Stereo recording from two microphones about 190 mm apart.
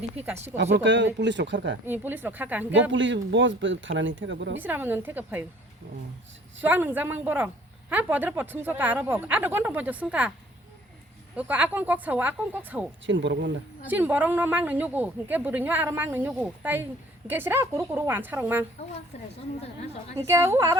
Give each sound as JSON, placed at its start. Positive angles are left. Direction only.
{"t": 0.5, "sound": "speech", "side_deg": -70}
{"t": 1.9, "sound": "a man's voice", "side_deg": -10}
{"t": 2.9, "sound": "speech", "side_deg": -75}
{"t": 4.5, "sound": "a man's voice", "side_deg": -10}
{"t": 6.6, "sound": "a man's voice", "side_deg": -10}
{"t": 11.3, "sound": "a man's voice", "side_deg": -5}
{"t": 13.1, "sound": "speech", "side_deg": -70}
{"t": 13.8, "sound": "a man's voice", "side_deg": -10}
{"t": 19.6, "sound": "a woman's voice", "side_deg": 35}
{"t": 20.1, "sound": "a man's voice", "side_deg": -15}